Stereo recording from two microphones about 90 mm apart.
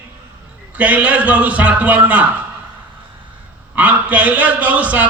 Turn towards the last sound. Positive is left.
turn(degrees=-15)  # may be behind; listen again after turning